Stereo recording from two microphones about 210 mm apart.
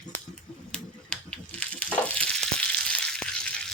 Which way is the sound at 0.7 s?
5° left (ahead or behind).